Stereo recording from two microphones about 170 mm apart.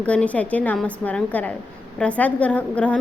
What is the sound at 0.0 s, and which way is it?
A woman's voice, 10° left (ahead or behind).